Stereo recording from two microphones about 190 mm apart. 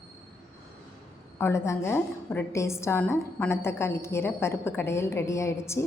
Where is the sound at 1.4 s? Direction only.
15° left (ahead or behind).